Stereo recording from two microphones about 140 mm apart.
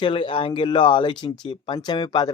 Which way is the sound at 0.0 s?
40° left (ahead or behind).